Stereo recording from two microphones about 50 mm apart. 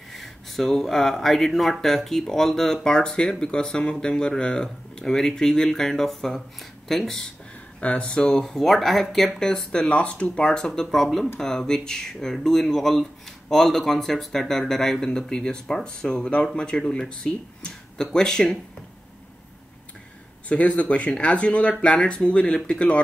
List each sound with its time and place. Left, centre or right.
0.1 s speech: centre
7.8 s speech: left
9.8 s speech: left
20.4 s speech: left